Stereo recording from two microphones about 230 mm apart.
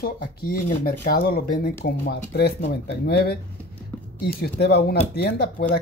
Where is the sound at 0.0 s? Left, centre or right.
Left.